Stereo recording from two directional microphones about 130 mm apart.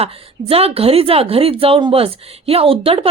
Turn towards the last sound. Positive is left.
turn(degrees=-45)  # may be behind; listen again after turning